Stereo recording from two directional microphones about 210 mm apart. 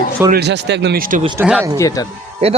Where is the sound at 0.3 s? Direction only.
50° right (ahead or behind).